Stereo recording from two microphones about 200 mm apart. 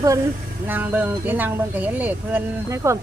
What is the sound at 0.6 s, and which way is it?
Speech, 10° right (ahead or behind).